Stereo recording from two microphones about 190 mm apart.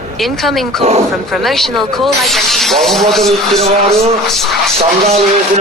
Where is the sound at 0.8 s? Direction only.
35° right (ahead or behind).